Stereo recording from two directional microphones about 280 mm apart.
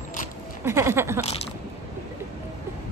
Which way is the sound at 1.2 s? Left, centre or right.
Left.